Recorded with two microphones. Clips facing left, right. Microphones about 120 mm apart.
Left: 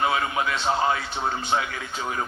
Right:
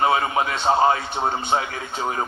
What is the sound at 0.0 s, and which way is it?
Speech, 35° right (ahead or behind).